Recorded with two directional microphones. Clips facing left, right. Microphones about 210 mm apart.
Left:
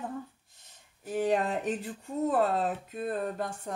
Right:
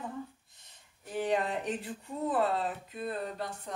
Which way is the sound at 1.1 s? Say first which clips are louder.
Left 3 dB; 45° left (ahead or behind).